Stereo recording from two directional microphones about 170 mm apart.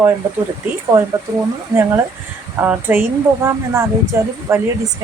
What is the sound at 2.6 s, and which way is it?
Speech, 10° right (ahead or behind).